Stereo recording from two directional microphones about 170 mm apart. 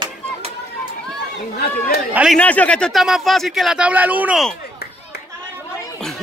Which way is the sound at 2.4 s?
5° left (ahead or behind).